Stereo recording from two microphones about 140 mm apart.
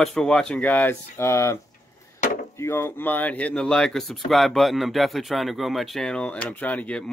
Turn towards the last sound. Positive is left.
turn(degrees=10)  # may be behind; listen again after turning